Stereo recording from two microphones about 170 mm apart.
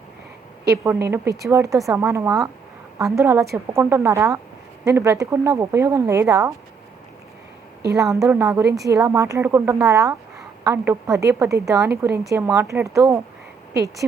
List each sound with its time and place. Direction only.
0.9 s speech: 15° right (ahead or behind)
8.1 s speech: 15° right (ahead or behind)